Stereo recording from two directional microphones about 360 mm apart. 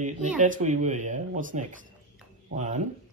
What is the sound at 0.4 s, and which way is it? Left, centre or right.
Speech, right.